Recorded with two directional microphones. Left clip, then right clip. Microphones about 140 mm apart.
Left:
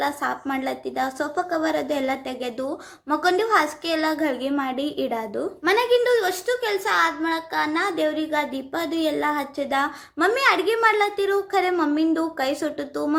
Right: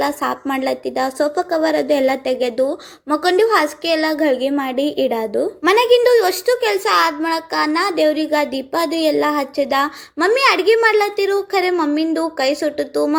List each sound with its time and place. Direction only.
0.0 s a woman's voice: 35° right (ahead or behind)
5.6 s a woman's voice: 55° right (ahead or behind); by 13.1 s 20° right (ahead or behind)